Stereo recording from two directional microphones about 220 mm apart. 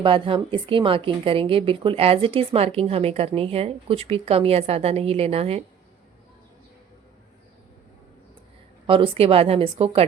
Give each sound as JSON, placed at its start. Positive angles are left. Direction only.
{"t": 0.0, "sound": "a woman's voice", "side_deg": -25}
{"t": 8.9, "sound": "a woman's voice", "side_deg": -25}